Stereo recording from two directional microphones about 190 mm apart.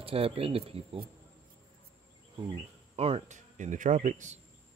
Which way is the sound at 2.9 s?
30° right (ahead or behind).